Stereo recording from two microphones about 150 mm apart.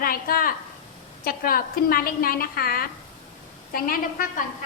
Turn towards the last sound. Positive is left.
turn(degrees=75)  # may be behind; listen again after turning